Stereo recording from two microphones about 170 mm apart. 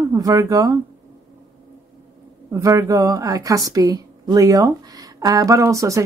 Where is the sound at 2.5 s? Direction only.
20° right (ahead or behind).